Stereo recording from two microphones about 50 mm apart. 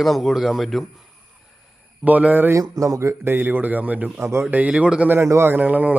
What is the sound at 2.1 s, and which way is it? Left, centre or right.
Speech, right.